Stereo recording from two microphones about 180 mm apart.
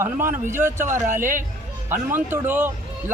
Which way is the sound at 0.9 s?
45° right (ahead or behind).